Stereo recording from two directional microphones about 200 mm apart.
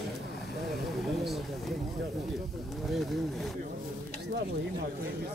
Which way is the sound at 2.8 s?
Centre (ahead or behind).